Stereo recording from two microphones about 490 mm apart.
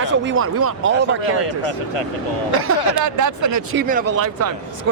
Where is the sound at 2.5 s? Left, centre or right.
Right.